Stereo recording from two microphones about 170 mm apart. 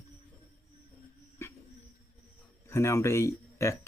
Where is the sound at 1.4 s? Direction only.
15° left (ahead or behind).